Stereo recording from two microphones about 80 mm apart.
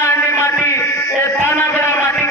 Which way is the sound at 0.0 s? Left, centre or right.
Left.